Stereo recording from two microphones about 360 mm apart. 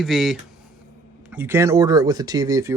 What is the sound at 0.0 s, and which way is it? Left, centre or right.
Speech, centre.